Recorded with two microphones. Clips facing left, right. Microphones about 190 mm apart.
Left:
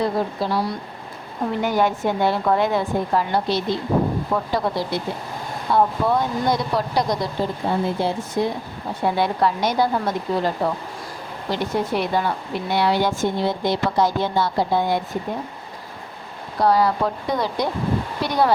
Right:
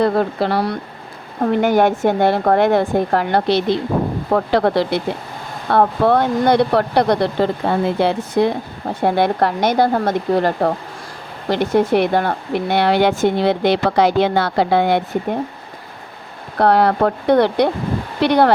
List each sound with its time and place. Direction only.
0.0 s a woman's voice: 65° right (ahead or behind)
16.6 s a woman's voice: 65° right (ahead or behind)